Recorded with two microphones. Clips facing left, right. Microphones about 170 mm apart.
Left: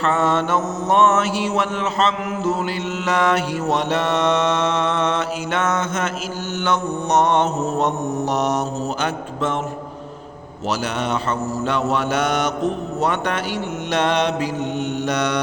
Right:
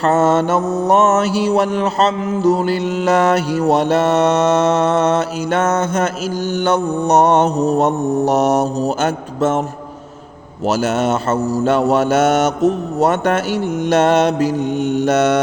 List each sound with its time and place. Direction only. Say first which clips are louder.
0.0 s mantra: right 6 dB; 40° right (ahead or behind)
10.7 s mantra: right 7 dB; 45° right (ahead or behind)